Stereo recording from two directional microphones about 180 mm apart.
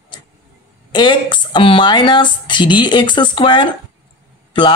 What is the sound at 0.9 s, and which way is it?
Speech, 25° left (ahead or behind).